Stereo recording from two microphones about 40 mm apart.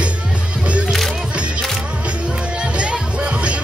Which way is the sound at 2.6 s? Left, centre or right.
Right.